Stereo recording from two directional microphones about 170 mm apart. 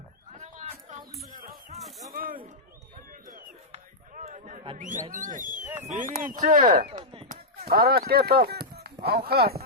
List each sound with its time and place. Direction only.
0.3 s a sound: 40° right (ahead or behind)
1.3 s music: 55° right (ahead or behind)
2.1 s a sound: 55° right (ahead or behind)
4.8 s speech: 50° right (ahead or behind)
5.6 s speech: 10° right (ahead or behind)
5.9 s speech: 45° right (ahead or behind)
6.9 s chop: 35° right (ahead or behind)
7.3 s speech: 65° right (ahead or behind)